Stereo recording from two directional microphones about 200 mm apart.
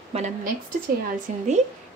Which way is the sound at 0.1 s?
35° right (ahead or behind).